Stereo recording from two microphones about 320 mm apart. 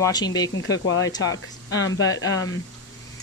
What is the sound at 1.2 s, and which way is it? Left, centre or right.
Speech, left.